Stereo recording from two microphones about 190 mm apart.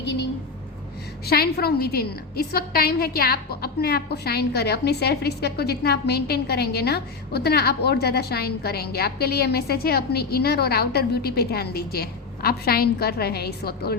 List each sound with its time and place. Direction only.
1.2 s a woman's voice: 55° left (ahead or behind)